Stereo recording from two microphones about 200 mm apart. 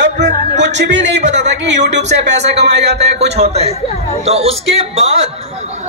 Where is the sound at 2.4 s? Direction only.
35° right (ahead or behind).